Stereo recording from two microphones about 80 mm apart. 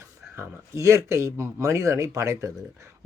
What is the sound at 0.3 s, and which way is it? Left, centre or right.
Speech, right.